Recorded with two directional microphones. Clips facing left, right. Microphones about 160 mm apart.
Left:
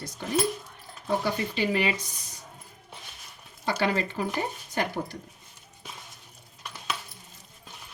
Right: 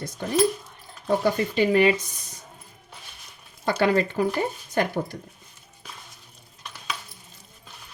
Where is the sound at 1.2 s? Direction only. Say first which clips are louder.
Right 6 dB; 50° right (ahead or behind).